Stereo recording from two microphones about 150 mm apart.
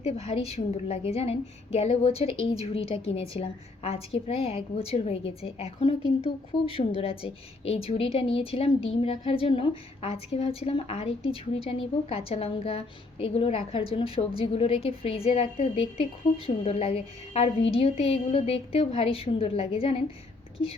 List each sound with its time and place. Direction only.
0.0 s a woman's voice: 40° left (ahead or behind)